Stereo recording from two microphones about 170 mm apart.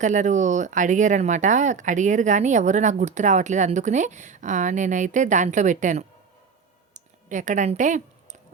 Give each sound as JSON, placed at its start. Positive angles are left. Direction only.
{"t": 0.0, "sound": "speech", "side_deg": -45}
{"t": 6.9, "sound": "clicking", "side_deg": -45}